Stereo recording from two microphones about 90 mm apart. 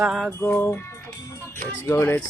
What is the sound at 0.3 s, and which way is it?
Speech, 25° left (ahead or behind).